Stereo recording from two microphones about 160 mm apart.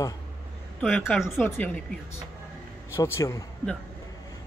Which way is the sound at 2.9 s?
15° left (ahead or behind).